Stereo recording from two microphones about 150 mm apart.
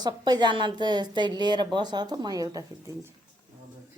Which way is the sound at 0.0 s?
25° right (ahead or behind).